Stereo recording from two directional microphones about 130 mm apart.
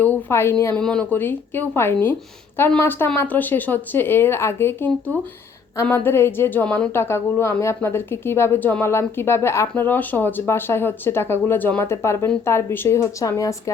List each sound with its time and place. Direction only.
0.0 s speech: 15° left (ahead or behind)
0.8 s a woman's voice: 5° left (ahead or behind); by 13.6 s 25° left (ahead or behind)